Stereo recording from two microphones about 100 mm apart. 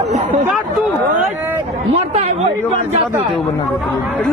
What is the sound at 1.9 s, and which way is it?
Speech, 90° right.